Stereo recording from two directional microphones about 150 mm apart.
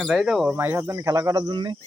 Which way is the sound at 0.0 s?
Centre (ahead or behind).